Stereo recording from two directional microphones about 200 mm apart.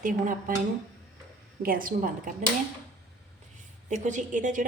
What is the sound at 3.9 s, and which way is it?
Speech, 35° right (ahead or behind).